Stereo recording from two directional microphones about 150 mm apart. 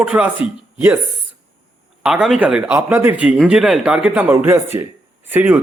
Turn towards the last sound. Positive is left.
turn(degrees=-10)  # may be behind; listen again after turning